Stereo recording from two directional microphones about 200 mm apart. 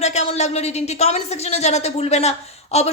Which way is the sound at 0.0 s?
35° left (ahead or behind).